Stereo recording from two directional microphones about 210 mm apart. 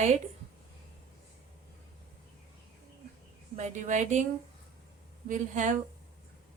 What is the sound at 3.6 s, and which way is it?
Speech, 35° right (ahead or behind).